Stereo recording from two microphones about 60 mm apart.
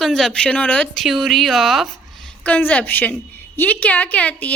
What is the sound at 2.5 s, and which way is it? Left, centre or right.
A woman's voice, left.